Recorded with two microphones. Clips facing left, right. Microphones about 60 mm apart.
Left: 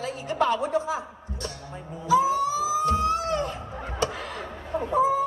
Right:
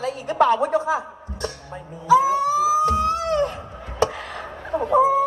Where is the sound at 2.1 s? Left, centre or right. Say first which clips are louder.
Right 5 dB; right.